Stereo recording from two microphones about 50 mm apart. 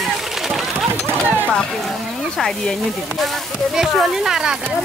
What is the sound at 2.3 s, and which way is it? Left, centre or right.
Speech, centre.